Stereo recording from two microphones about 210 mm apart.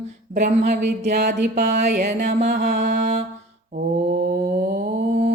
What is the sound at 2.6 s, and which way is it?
Mantra, 35° right (ahead or behind).